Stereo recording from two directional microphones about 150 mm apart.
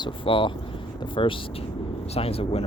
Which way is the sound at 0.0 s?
35° left (ahead or behind).